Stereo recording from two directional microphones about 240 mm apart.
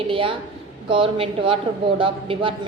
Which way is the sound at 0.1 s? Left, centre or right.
Right.